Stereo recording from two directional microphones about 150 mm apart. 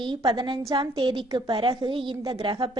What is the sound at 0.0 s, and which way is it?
A woman's voice, 35° right (ahead or behind).